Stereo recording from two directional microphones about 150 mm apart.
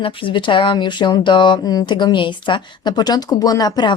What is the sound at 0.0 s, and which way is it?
A woman's voice, 35° left (ahead or behind).